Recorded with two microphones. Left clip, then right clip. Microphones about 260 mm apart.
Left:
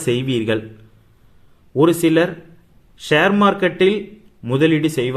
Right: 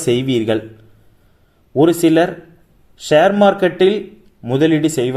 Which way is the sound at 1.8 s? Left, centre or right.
Centre.